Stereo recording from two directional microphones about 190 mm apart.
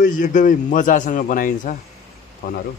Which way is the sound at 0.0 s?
45° left (ahead or behind).